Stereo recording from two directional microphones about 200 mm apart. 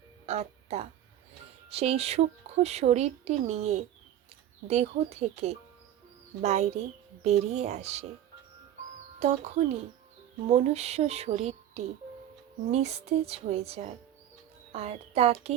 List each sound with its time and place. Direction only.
0.3 s speech: 30° right (ahead or behind)
9.2 s speech: 35° right (ahead or behind)
10.4 s speech: 30° right (ahead or behind)